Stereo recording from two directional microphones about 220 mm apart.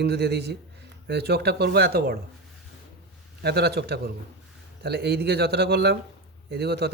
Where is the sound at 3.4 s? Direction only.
45° right (ahead or behind).